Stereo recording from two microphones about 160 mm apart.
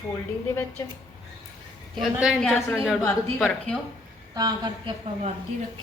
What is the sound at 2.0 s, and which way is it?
A woman's voice, centre (ahead or behind).